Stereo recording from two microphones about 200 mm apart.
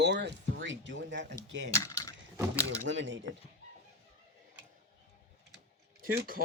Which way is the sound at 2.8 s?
65° right (ahead or behind).